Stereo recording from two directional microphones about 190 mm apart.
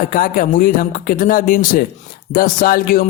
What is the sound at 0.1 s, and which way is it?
Music, 45° left (ahead or behind).